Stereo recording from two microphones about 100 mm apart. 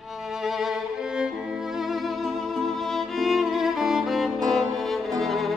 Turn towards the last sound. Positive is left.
turn(degrees=0)  # may be behind; listen again after turning